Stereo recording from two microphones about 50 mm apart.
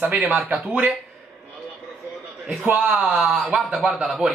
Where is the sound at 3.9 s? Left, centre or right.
Centre.